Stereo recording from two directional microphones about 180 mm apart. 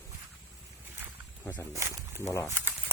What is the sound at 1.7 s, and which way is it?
Speech, 15° right (ahead or behind).